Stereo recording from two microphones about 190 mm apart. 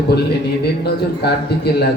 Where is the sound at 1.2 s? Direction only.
60° left (ahead or behind).